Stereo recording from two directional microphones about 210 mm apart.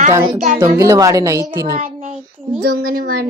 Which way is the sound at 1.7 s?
35° right (ahead or behind).